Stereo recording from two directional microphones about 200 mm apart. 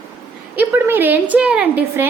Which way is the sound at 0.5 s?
10° right (ahead or behind).